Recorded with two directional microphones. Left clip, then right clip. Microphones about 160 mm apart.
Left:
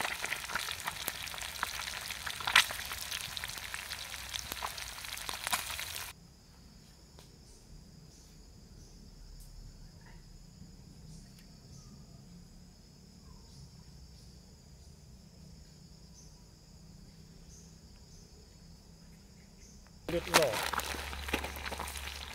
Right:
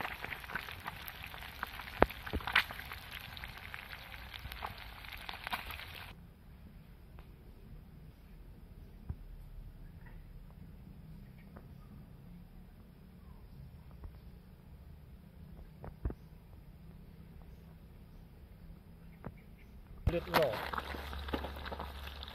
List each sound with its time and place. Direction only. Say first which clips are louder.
0.0 s frying: left 5 dB; 35° left (ahead or behind)
20.2 s speech: left 4 dB; 30° left (ahead or behind)
21.1 s a sound: left 4 dB; 25° left (ahead or behind)